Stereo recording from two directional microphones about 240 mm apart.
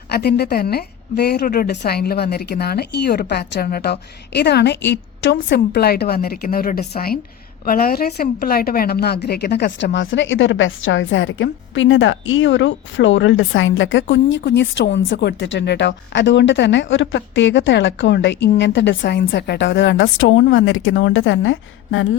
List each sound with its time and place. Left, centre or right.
0.1 s a woman's voice: left